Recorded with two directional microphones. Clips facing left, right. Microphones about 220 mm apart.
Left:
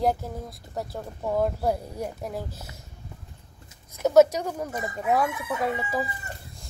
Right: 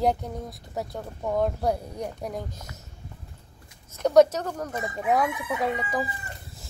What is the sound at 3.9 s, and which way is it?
Speech, 5° left (ahead or behind).